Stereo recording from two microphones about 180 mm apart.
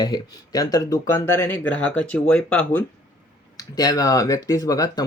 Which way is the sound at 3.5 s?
20° left (ahead or behind).